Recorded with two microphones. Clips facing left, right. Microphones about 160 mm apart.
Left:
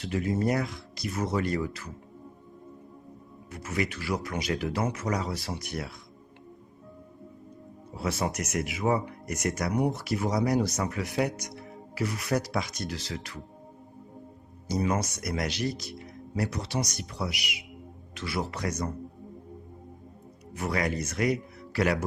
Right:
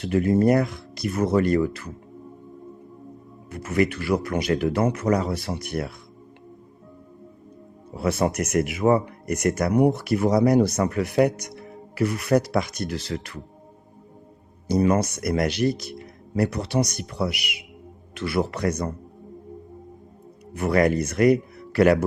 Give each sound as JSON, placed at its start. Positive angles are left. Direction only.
{"t": 0.0, "sound": "speech", "side_deg": -55}
{"t": 3.5, "sound": "speech", "side_deg": -55}
{"t": 7.9, "sound": "speech", "side_deg": -60}
{"t": 14.7, "sound": "speech", "side_deg": -55}
{"t": 20.5, "sound": "speech", "side_deg": -60}